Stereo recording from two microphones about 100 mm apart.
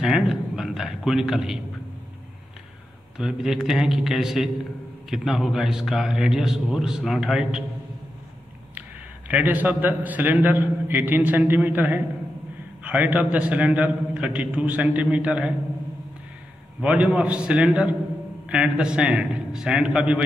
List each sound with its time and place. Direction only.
0.0 s a man's voice: 5° right (ahead or behind)
3.2 s a man's voice: 5° right (ahead or behind)
9.3 s a man's voice: 15° right (ahead or behind)
16.8 s a man's voice: 15° right (ahead or behind)